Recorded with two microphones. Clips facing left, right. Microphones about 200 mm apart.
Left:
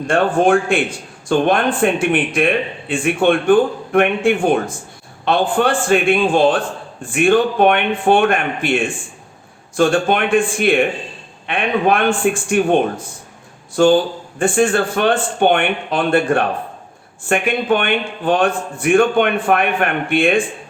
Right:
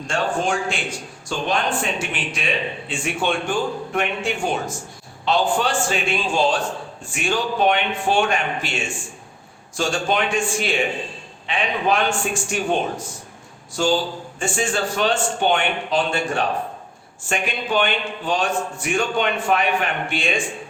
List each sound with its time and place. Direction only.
0.1 s a man's voice: 55° left (ahead or behind)